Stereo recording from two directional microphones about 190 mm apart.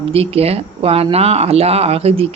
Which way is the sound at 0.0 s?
30° right (ahead or behind).